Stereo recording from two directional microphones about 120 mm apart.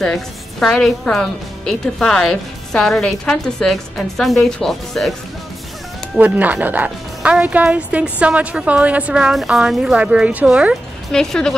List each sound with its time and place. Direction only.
0.0 s a woman's voice: 5° left (ahead or behind)
6.1 s a woman's voice: 15° right (ahead or behind)
11.1 s a woman's voice: 5° left (ahead or behind)